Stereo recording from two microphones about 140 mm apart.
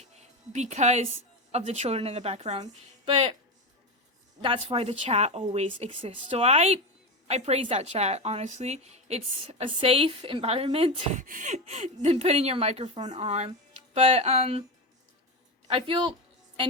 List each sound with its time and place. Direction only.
0.0 s a woman's voice: 55° right (ahead or behind)
3.1 s speech: 40° right (ahead or behind)
4.4 s a woman's voice: 40° right (ahead or behind)
11.2 s a woman's voice: 65° right (ahead or behind); by 14.6 s 50° right (ahead or behind)
15.7 s speech: 40° right (ahead or behind)